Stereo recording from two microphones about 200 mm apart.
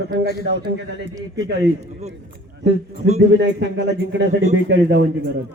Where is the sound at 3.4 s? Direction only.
60° right (ahead or behind).